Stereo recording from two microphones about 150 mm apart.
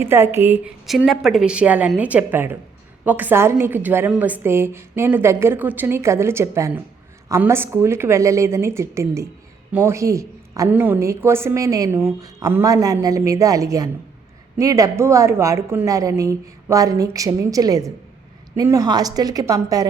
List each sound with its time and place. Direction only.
0.0 s a woman's voice: 15° right (ahead or behind)
0.9 s a woman's voice: centre (ahead or behind); by 19.9 s 25° right (ahead or behind)